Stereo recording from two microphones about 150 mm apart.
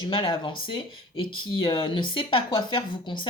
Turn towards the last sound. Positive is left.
turn(degrees=30)  # may be behind; listen again after turning